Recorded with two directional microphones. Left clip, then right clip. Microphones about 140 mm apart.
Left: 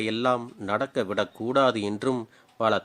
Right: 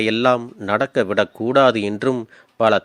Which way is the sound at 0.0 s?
40° right (ahead or behind).